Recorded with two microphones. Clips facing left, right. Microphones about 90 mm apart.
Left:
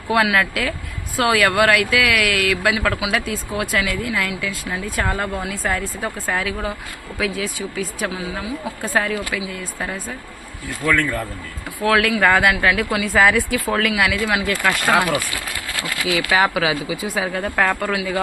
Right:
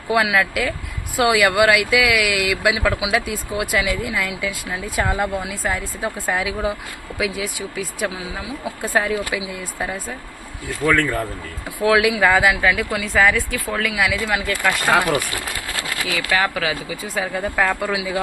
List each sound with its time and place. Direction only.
0.1 s speech: 5° right (ahead or behind)
10.8 s speech: 15° right (ahead or behind); by 14.9 s centre (ahead or behind)
16.1 s speech: 10° left (ahead or behind); by 18.2 s 5° right (ahead or behind)